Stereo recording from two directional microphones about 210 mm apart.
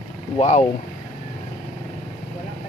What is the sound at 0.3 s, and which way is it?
Speech, 35° left (ahead or behind).